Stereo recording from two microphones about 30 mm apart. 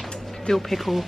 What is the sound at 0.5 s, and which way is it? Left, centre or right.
Speech, centre.